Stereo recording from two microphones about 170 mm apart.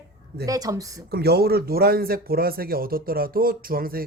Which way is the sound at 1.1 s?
70° right (ahead or behind).